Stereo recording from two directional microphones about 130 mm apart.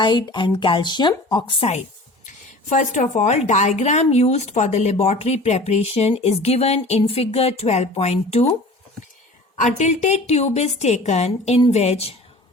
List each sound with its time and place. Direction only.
0.0 s speech: 35° left (ahead or behind)
2.2 s a woman's voice: 75° left (ahead or behind); by 8.4 s 55° left (ahead or behind)
9.6 s a woman's voice: 65° left (ahead or behind)